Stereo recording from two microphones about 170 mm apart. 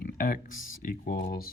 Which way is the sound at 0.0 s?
60° left (ahead or behind).